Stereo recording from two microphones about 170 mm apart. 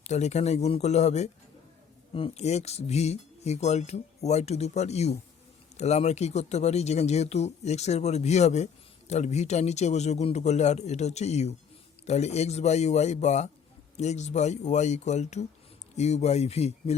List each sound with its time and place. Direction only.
0.0 s speech: 40° left (ahead or behind)